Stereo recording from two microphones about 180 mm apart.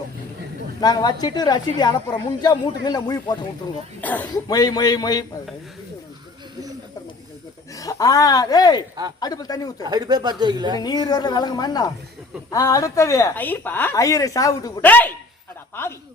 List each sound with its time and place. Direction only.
0.8 s a woman's voice: 25° left (ahead or behind)
4.0 s a woman's voice: 10° left (ahead or behind)
4.4 s a woman's voice: 20° left (ahead or behind)
7.8 s a woman's voice: 20° left (ahead or behind)
9.8 s speech: 20° right (ahead or behind)
10.8 s a woman's voice: 20° left (ahead or behind)